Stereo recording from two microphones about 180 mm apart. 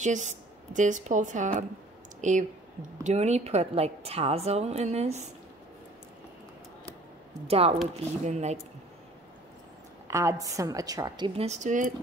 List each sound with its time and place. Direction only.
0.0 s a woman's voice: 40° right (ahead or behind)
7.4 s a woman's voice: 35° right (ahead or behind)
10.0 s a woman's voice: 15° right (ahead or behind); by 11.9 s 45° right (ahead or behind)